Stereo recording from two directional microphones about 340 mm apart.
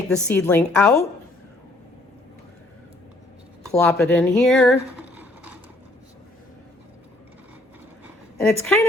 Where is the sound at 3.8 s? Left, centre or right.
Centre.